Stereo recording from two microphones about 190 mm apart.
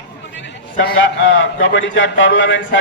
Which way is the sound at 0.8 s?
70° left (ahead or behind).